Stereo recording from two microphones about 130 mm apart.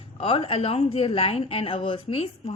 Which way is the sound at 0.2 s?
45° left (ahead or behind).